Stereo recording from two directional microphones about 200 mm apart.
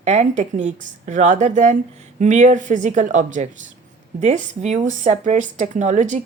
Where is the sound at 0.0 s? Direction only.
35° right (ahead or behind).